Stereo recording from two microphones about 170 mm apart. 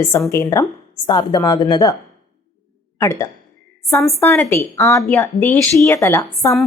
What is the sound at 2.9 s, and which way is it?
A woman's voice, 15° left (ahead or behind).